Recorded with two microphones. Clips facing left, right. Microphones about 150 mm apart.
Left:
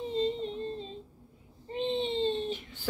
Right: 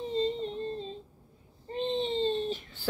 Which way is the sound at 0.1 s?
5° left (ahead or behind).